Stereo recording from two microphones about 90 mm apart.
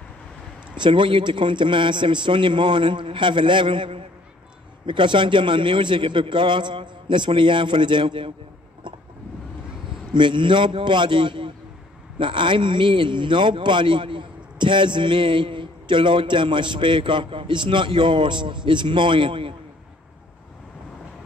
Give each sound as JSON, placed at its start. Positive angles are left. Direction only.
{"t": 0.7, "sound": "a man's voice", "side_deg": -65}
{"t": 10.1, "sound": "a man's voice", "side_deg": -60}